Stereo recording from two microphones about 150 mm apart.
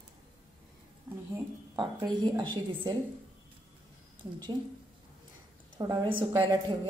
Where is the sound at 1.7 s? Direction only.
30° right (ahead or behind).